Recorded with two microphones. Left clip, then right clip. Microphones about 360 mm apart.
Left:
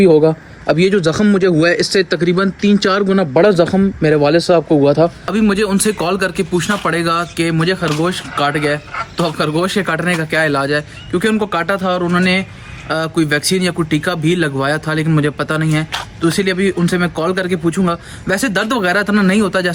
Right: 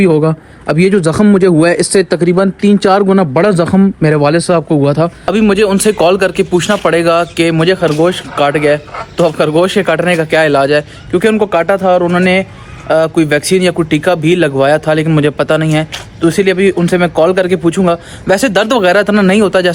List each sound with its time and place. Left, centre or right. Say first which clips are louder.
0.7 s speech: right 2 dB; centre
5.2 s a man's voice: right 6 dB; centre